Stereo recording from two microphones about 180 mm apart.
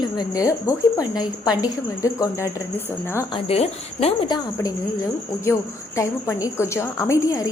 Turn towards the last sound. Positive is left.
turn(degrees=15)  # may be behind; listen again after turning